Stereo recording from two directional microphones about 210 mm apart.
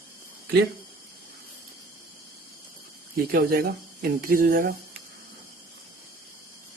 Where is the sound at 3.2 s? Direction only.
45° right (ahead or behind).